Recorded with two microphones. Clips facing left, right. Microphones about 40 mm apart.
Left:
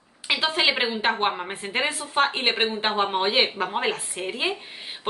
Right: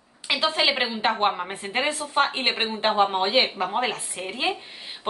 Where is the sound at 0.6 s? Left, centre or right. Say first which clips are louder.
Left 1 dB; centre.